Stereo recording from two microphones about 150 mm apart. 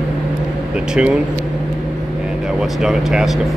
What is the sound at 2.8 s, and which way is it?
Speech, 5° right (ahead or behind).